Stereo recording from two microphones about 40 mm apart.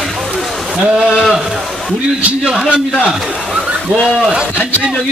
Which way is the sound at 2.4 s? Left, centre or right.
Centre.